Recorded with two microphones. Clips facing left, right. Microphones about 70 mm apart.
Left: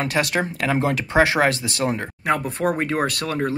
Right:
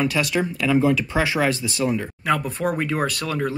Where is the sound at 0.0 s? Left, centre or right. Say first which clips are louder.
Even; left.